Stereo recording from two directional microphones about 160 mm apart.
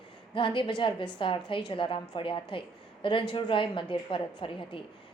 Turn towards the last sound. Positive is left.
turn(degrees=30)  # may be behind; listen again after turning